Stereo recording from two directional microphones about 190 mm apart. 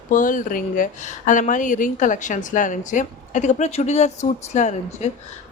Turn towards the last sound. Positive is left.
turn(degrees=40)  # may be behind; listen again after turning